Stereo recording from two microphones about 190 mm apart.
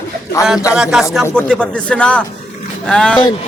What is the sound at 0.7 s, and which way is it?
A man's voice, 5° right (ahead or behind).